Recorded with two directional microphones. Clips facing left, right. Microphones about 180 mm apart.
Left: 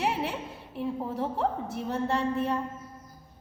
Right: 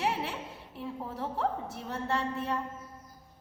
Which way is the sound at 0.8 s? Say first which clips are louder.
Left 6 dB; 20° left (ahead or behind).